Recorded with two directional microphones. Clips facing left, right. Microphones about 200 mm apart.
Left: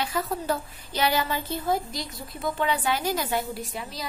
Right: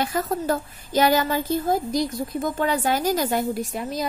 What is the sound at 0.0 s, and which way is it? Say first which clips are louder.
A woman's voice: right 4 dB; 45° right (ahead or behind).